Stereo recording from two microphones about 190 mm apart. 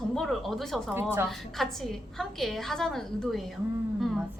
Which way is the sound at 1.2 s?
Centre (ahead or behind).